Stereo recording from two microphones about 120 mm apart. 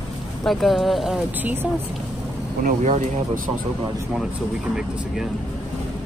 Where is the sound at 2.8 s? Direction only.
70° right (ahead or behind).